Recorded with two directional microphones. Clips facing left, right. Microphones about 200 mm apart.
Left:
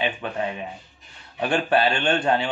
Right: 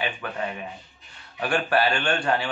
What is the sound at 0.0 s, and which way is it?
A man's voice, 20° left (ahead or behind).